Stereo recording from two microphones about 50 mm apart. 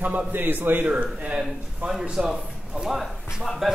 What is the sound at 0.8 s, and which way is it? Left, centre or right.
Speech, right.